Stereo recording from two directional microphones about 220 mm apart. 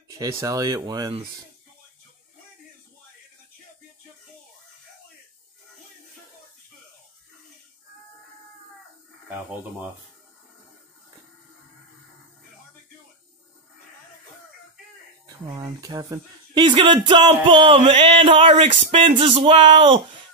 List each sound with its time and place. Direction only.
0.2 s speech: 15° right (ahead or behind)
15.2 s speech: 15° right (ahead or behind)